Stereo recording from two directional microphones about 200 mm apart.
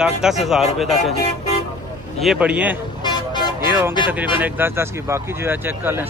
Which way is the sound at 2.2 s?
5° right (ahead or behind).